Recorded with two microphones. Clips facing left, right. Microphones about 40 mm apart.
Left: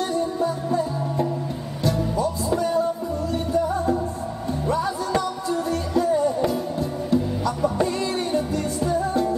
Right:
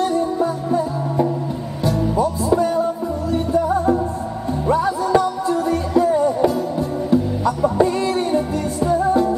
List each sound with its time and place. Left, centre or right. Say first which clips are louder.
0.4 s music: right 4 dB; right
4.8 s music: right 7 dB; centre
5.9 s music: right 4 dB; right
7.7 s music: right 6 dB; centre